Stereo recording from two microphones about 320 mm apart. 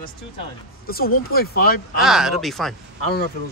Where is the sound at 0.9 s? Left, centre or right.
Left.